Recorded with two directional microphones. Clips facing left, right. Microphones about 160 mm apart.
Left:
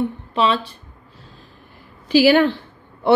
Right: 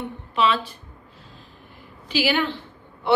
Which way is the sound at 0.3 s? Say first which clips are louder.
Even; 30° left (ahead or behind).